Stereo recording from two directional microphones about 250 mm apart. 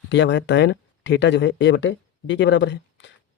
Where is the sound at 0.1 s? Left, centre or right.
Left.